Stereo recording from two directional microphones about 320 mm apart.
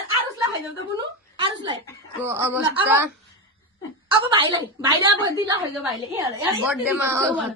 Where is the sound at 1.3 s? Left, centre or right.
Centre.